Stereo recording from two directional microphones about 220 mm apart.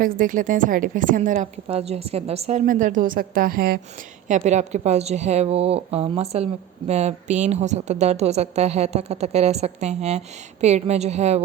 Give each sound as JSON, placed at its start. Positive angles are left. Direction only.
{"t": 0.2, "sound": "a woman's voice", "side_deg": -35}